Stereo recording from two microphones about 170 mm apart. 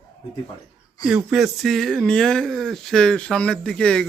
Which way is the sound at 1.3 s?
Centre (ahead or behind).